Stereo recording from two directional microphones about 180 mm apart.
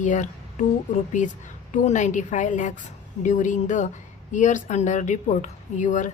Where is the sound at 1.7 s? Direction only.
45° left (ahead or behind).